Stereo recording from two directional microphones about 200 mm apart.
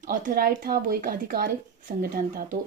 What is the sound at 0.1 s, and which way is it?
Speech, 45° right (ahead or behind).